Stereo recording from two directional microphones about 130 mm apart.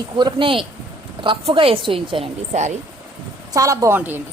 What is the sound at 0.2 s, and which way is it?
A woman's voice, 40° right (ahead or behind).